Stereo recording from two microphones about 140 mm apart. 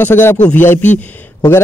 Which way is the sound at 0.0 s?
15° left (ahead or behind).